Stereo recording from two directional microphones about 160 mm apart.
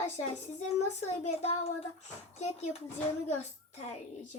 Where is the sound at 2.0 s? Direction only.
45° left (ahead or behind).